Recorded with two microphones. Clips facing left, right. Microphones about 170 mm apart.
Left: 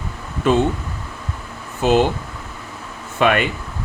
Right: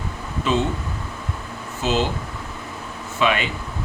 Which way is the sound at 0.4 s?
55° left (ahead or behind).